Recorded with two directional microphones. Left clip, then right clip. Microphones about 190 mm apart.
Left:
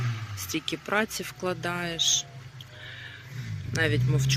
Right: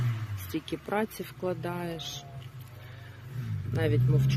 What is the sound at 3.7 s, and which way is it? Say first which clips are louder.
Speech: left 3 dB; 5° right (ahead or behind).